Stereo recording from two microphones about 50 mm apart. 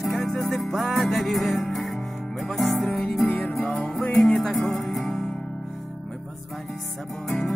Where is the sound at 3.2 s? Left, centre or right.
Left.